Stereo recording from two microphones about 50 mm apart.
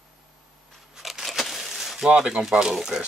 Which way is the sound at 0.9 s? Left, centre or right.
Centre.